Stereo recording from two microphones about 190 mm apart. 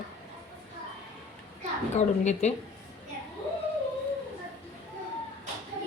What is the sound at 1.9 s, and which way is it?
Speech, 35° left (ahead or behind).